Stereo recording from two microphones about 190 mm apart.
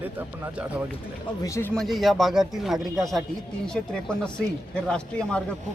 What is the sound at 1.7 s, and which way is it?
A man's voice, centre (ahead or behind).